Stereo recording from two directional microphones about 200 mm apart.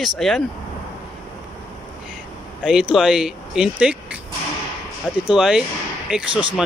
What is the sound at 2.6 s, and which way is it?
Speech, 5° right (ahead or behind).